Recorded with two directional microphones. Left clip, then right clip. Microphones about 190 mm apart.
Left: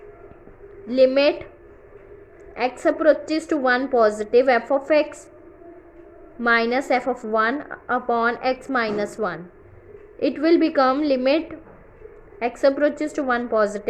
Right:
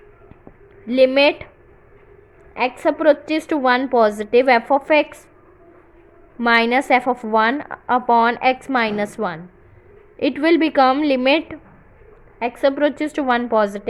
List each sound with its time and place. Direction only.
0.9 s a woman's voice: 30° right (ahead or behind)
2.6 s a woman's voice: 30° right (ahead or behind)
6.4 s a woman's voice: 35° right (ahead or behind)